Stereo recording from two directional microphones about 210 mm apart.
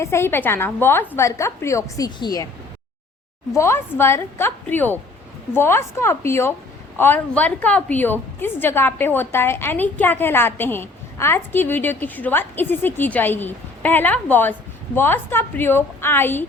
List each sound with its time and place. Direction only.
0.0 s a woman's voice: 10° left (ahead or behind)
3.5 s a woman's voice: 15° left (ahead or behind)